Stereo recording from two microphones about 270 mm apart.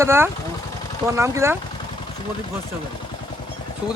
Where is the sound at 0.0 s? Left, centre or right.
Centre.